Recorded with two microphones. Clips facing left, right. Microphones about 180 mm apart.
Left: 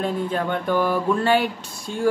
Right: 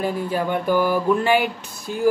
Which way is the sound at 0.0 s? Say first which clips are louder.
Right 1 dB; 5° right (ahead or behind).